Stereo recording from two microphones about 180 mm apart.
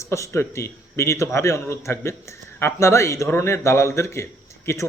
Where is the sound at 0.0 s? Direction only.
15° left (ahead or behind).